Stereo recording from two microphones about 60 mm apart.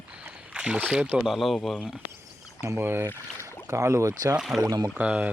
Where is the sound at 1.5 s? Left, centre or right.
Centre.